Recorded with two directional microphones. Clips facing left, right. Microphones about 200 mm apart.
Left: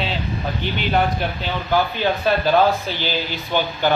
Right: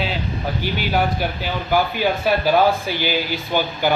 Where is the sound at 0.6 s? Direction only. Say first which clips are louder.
Left 1 dB; 5° right (ahead or behind).